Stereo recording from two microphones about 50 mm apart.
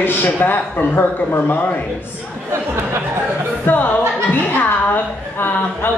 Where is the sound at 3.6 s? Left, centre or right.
Left.